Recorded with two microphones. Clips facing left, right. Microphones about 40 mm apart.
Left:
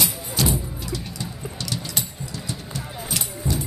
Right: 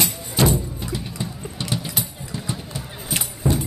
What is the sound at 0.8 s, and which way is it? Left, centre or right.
Clip-clop, right.